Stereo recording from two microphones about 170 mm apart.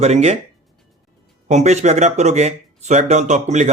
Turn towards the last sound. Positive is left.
turn(degrees=-45)  # may be behind; listen again after turning